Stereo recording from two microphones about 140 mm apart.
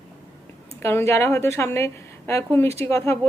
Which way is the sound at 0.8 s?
20° left (ahead or behind).